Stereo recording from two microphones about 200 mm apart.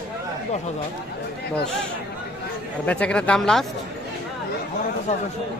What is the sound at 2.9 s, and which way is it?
Speech, 5° left (ahead or behind).